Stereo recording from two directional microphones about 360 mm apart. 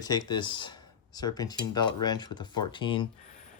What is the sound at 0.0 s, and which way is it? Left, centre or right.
Speech, centre.